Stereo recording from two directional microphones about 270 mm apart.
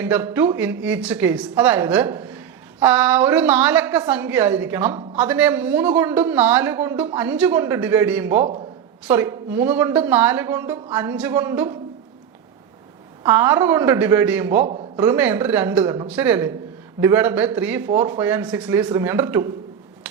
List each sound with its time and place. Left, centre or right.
0.0 s a woman's voice: centre
13.2 s a woman's voice: centre
14.6 s a man's voice: right
14.9 s a woman's voice: centre